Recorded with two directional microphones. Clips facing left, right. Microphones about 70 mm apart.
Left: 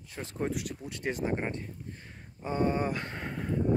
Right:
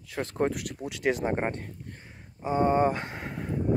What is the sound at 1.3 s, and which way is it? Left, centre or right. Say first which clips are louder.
Speech: right 4 dB; right.